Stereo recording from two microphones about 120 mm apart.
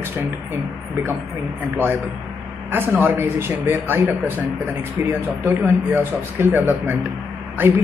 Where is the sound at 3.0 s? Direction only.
20° right (ahead or behind).